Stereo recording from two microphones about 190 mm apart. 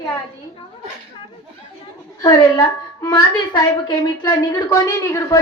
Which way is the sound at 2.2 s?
20° left (ahead or behind).